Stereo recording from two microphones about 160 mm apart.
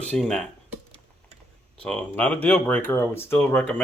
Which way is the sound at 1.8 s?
5° left (ahead or behind).